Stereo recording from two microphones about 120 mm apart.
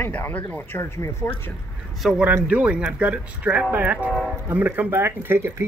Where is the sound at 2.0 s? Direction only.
5° right (ahead or behind).